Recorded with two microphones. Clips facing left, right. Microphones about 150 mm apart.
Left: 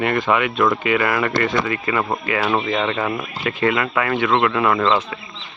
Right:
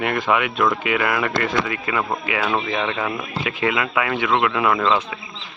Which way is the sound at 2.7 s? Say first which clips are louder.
Left 3 dB; 10° right (ahead or behind).